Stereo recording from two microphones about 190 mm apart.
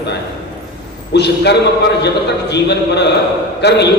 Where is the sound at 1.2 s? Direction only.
60° left (ahead or behind).